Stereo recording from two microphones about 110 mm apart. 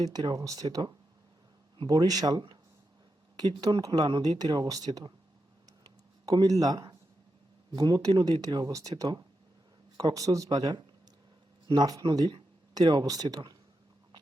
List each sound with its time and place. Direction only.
0.0 s speech: 40° right (ahead or behind)
5.6 s a sound: 35° right (ahead or behind)
6.3 s speech: 35° right (ahead or behind)